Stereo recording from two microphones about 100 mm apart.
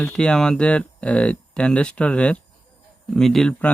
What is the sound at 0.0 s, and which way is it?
A man's voice, 10° left (ahead or behind).